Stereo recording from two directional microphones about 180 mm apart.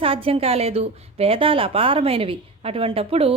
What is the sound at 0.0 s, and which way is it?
A woman's voice, 30° right (ahead or behind).